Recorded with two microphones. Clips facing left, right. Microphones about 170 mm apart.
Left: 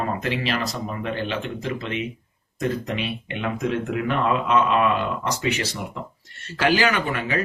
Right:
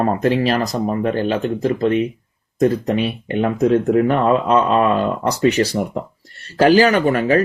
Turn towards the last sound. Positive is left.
turn(degrees=-40)  # may be behind; listen again after turning